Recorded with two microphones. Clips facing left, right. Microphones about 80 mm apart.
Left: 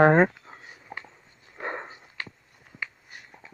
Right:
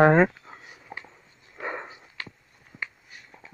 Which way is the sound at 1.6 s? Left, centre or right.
Centre.